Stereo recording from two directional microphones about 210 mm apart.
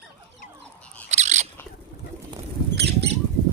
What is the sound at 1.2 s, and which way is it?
Bird, 35° right (ahead or behind).